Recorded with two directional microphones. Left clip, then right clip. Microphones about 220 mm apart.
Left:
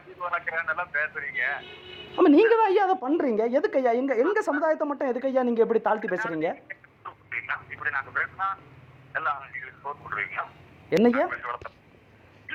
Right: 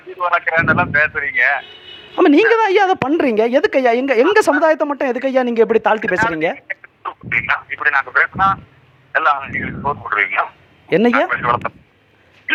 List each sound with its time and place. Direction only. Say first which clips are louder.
0.2 s a man's voice: right 13 dB; 55° right (ahead or behind)
2.2 s a woman's voice: right 7 dB; 35° right (ahead or behind)
4.2 s a man's voice: right 14 dB; 60° right (ahead or behind)
4.6 s a woman's voice: right 10 dB; 35° right (ahead or behind)
6.1 s a man's voice: right 11 dB; 55° right (ahead or behind)
10.8 s speech: right 7 dB; 30° right (ahead or behind)
11.1 s a man's voice: right 12 dB; 55° right (ahead or behind)
12.5 s dog: right 19 dB; 55° right (ahead or behind)